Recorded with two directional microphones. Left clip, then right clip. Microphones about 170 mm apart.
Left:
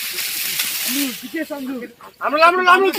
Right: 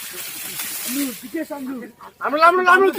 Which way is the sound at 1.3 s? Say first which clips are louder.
Left 1 dB; 50° left (ahead or behind).